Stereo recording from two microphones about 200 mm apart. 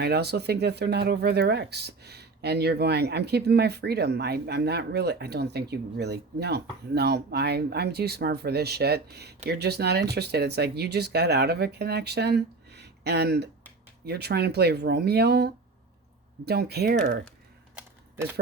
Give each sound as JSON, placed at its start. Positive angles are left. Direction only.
{"t": 0.0, "sound": "speech", "side_deg": -55}